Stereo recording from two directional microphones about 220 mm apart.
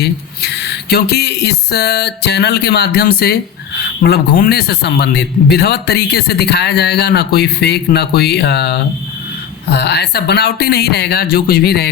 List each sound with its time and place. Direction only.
0.0 s a man's voice: 50° left (ahead or behind)